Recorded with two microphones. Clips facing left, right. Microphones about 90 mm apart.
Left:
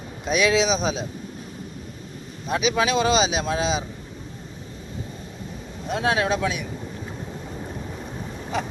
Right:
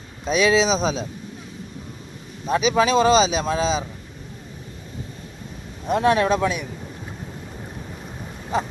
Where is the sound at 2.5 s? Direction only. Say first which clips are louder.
Right 3 dB; 35° right (ahead or behind).